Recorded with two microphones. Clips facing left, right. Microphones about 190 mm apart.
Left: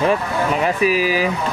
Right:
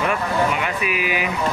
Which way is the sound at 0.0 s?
35° left (ahead or behind).